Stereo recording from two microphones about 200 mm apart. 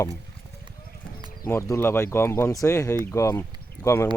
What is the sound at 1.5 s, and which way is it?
Speech, 15° left (ahead or behind).